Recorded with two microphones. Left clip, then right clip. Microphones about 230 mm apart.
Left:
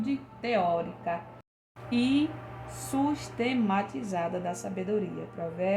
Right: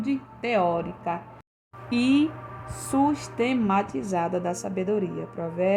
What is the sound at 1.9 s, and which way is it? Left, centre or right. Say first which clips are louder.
Speech: right 5 dB; right.